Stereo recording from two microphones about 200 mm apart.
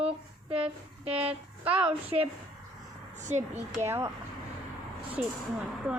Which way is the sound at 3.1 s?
35° right (ahead or behind).